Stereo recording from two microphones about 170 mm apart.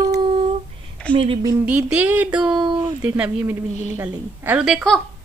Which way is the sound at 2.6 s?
25° right (ahead or behind).